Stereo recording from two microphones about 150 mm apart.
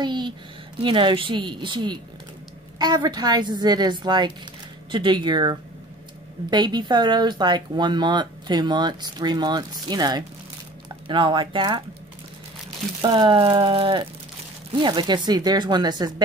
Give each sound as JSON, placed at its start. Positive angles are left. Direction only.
{"t": 0.0, "sound": "speech", "side_deg": -30}
{"t": 13.0, "sound": "speech", "side_deg": -30}